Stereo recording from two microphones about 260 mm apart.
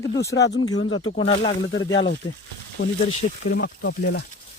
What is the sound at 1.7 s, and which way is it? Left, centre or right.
Speech, left.